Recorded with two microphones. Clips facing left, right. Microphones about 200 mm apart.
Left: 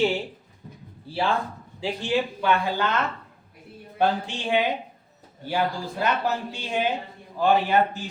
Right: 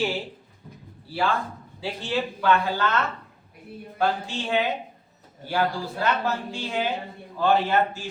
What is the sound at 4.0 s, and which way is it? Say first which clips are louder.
Speech: left 2 dB; 20° left (ahead or behind).